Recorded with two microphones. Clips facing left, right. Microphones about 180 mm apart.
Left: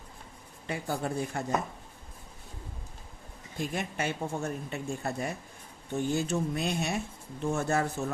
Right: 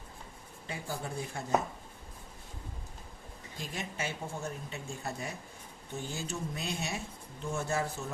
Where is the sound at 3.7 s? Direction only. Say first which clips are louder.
Left 4 dB; 60° left (ahead or behind).